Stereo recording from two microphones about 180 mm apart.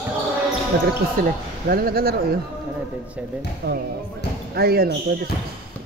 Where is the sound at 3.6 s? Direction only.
60° right (ahead or behind).